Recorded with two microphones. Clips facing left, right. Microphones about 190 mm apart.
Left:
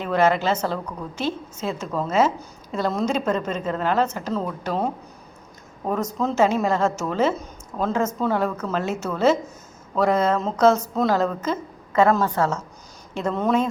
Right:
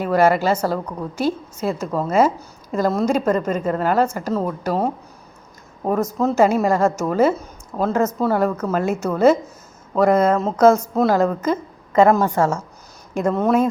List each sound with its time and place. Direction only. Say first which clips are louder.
0.0 s speech: right 4 dB; 10° right (ahead or behind)